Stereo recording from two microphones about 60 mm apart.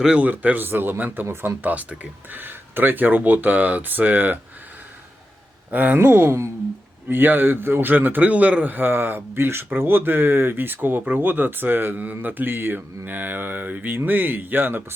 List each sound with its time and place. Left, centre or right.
0.2 s speech: right
1.7 s speech: right
5.7 s speech: right
6.0 s speech: right
7.1 s speech: right